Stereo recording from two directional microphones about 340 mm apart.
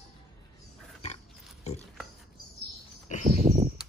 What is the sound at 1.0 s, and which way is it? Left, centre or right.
Pig, centre.